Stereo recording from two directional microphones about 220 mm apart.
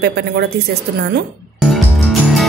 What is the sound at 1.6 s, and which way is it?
Music, centre (ahead or behind).